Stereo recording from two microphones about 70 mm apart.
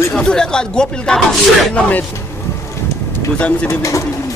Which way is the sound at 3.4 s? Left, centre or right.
Centre.